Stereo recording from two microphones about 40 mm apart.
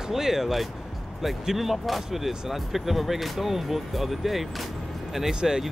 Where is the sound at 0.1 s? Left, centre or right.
Centre.